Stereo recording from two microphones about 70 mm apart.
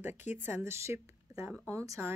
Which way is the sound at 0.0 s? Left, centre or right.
Right.